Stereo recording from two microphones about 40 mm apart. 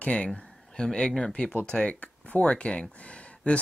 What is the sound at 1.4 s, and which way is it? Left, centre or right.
Speech, left.